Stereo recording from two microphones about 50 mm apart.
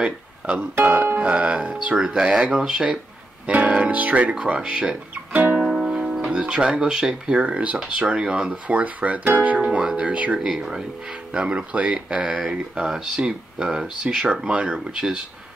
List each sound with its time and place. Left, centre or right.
0.5 s speech: right
1.0 s music: right
1.3 s speech: right
3.4 s speech: right
5.1 s music: right
5.7 s music: centre
6.3 s speech: right
10.6 s speech: centre